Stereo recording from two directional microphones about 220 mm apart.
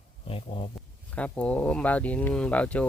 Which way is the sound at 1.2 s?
5° left (ahead or behind).